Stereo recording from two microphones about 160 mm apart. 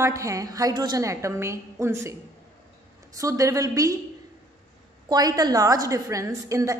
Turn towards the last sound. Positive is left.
turn(degrees=-20)  # may be behind; listen again after turning